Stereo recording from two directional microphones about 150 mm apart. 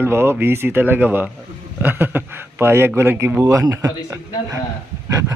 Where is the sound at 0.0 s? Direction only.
15° right (ahead or behind).